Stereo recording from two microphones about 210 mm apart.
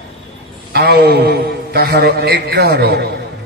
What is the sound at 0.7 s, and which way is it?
A man's voice, 50° right (ahead or behind).